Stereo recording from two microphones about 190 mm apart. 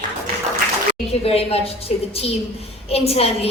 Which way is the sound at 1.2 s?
30° left (ahead or behind).